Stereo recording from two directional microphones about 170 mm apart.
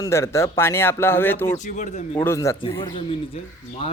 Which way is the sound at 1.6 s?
45° left (ahead or behind).